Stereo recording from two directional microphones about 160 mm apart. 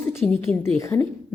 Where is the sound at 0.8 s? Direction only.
15° left (ahead or behind).